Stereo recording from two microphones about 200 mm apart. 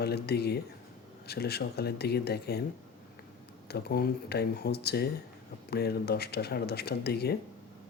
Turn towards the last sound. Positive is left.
turn(degrees=55)  # may be behind; listen again after turning